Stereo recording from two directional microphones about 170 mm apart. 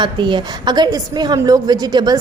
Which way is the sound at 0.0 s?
25° right (ahead or behind).